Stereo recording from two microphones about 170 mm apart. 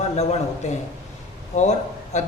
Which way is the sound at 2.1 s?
40° left (ahead or behind).